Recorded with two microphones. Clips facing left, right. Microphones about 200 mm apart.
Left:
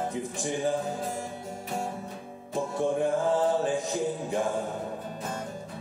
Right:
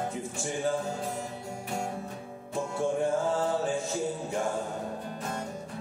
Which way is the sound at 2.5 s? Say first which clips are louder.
Left 2 dB; 15° left (ahead or behind).